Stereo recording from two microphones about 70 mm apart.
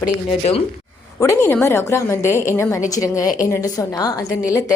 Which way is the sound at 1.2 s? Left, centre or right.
Left.